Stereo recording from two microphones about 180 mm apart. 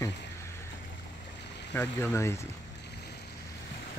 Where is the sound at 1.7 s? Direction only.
10° left (ahead or behind).